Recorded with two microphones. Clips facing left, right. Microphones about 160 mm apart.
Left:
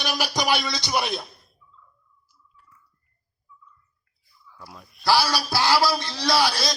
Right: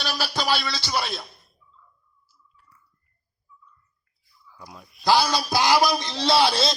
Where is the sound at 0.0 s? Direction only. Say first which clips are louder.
Left 2 dB; 15° left (ahead or behind).